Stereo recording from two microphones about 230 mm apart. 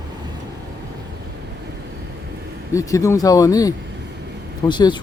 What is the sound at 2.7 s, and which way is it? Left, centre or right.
Speech, centre.